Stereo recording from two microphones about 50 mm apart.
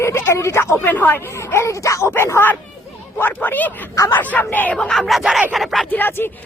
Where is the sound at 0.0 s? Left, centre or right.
Left.